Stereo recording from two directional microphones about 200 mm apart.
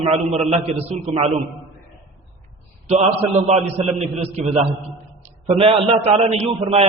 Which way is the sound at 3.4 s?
35° right (ahead or behind).